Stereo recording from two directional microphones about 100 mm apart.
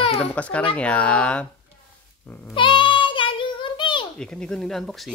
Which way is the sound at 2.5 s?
55° left (ahead or behind).